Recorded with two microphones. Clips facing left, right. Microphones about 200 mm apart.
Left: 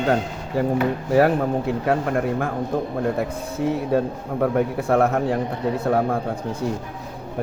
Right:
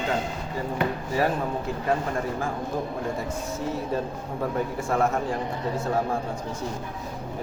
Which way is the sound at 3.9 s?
60° left (ahead or behind).